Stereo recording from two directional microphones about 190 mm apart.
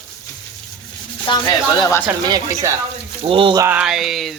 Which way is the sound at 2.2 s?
20° right (ahead or behind).